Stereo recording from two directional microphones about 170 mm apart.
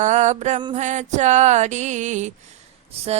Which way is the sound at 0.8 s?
45° right (ahead or behind).